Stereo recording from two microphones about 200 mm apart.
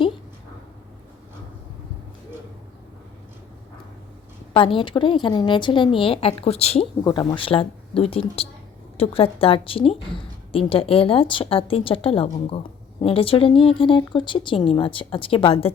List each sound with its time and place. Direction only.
4.5 s a woman's voice: 25° left (ahead or behind)
7.0 s a woman's voice: 20° left (ahead or behind)